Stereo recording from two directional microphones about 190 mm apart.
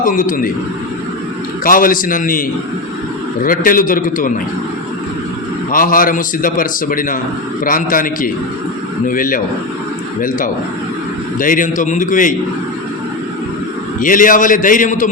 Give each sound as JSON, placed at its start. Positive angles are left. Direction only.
{"t": 0.0, "sound": "a man's voice", "side_deg": 45}
{"t": 1.6, "sound": "a man's voice", "side_deg": 45}
{"t": 3.4, "sound": "a man's voice", "side_deg": 50}
{"t": 5.7, "sound": "a man's voice", "side_deg": 45}
{"t": 14.0, "sound": "a man's voice", "side_deg": 45}